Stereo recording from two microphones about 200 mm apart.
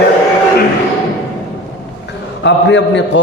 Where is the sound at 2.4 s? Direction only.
60° left (ahead or behind).